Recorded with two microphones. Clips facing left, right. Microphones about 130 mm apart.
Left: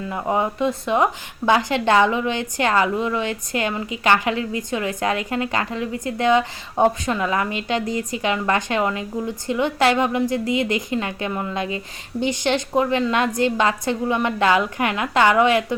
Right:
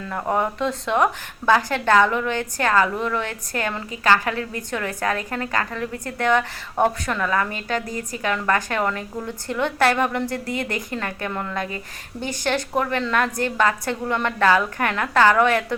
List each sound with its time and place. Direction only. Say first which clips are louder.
0.1 s a woman's voice: even; 10° left (ahead or behind)